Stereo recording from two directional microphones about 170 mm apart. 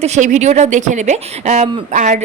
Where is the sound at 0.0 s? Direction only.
45° right (ahead or behind).